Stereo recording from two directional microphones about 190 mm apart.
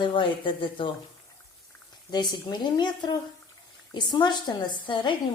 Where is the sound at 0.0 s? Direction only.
25° left (ahead or behind).